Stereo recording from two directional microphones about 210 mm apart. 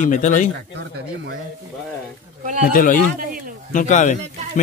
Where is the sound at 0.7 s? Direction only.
55° right (ahead or behind).